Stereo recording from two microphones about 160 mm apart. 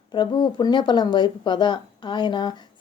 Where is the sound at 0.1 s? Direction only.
30° left (ahead or behind).